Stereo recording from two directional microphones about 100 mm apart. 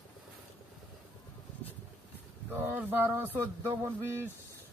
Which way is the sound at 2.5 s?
20° right (ahead or behind).